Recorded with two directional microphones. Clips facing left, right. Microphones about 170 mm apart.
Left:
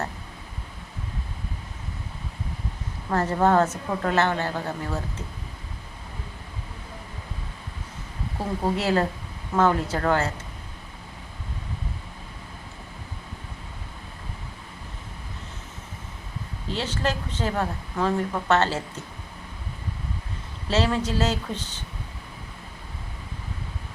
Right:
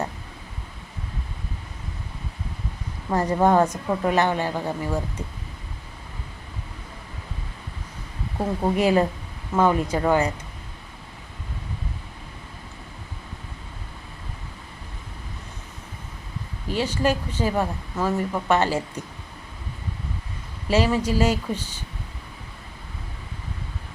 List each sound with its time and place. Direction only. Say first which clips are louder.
3.1 s speech: right 2 dB; 15° right (ahead or behind)
8.7 s speech: right 5 dB; 15° right (ahead or behind)
16.7 s speech: right 5 dB; 10° right (ahead or behind)
20.7 s speech: right 3 dB; 10° right (ahead or behind)